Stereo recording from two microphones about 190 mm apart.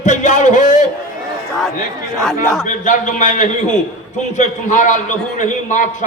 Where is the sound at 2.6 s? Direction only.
40° left (ahead or behind).